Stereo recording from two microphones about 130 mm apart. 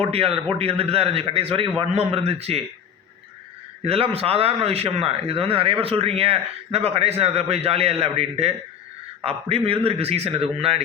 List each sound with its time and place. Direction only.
0.0 s a man's voice: 50° right (ahead or behind)
3.8 s a man's voice: 50° right (ahead or behind)